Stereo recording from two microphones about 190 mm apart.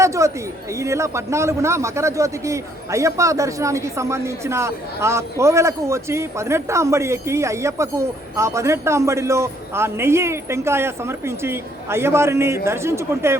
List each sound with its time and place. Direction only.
0.0 s a man's voice: 15° right (ahead or behind)